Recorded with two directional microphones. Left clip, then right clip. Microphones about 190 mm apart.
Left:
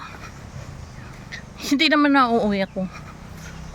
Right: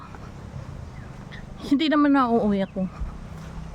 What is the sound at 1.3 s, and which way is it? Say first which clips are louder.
Speech: left 1 dB; 10° right (ahead or behind).